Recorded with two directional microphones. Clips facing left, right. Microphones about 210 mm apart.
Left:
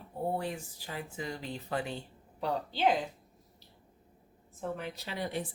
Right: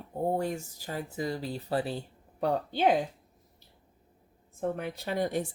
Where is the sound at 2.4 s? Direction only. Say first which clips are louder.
Right 5 dB; 50° right (ahead or behind).